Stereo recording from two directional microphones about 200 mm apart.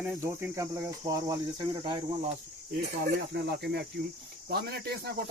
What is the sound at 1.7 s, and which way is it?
Cricket, 25° right (ahead or behind).